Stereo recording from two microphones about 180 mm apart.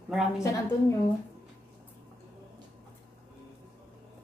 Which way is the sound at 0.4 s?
15° left (ahead or behind).